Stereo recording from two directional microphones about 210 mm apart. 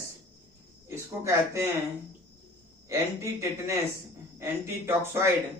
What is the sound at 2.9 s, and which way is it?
Speech, 15° right (ahead or behind).